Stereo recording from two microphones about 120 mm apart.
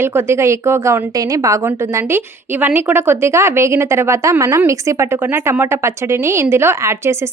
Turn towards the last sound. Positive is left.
turn(degrees=-20)  # may be behind; listen again after turning